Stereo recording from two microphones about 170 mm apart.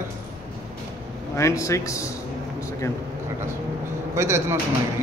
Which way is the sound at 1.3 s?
15° left (ahead or behind).